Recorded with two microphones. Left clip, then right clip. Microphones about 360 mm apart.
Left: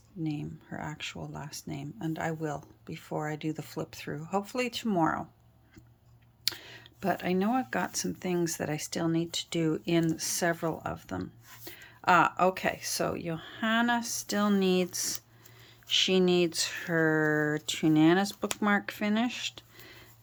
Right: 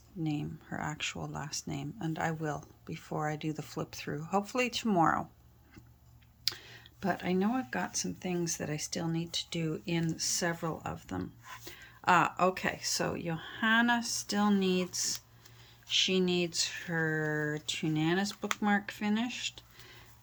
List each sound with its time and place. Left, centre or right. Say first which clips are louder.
0.2 s speech: left 1 dB; centre
6.4 s speech: left 2 dB; centre